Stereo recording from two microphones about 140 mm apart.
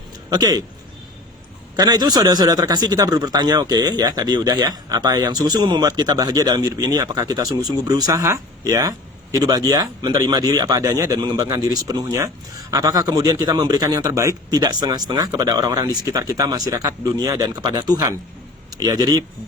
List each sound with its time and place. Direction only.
0.3 s a man's voice: 25° right (ahead or behind)
1.7 s a man's voice: 30° right (ahead or behind)